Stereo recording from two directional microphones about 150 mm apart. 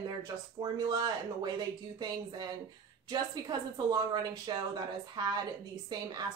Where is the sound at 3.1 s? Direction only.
30° right (ahead or behind).